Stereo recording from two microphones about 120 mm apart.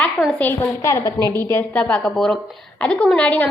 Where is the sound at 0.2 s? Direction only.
30° left (ahead or behind).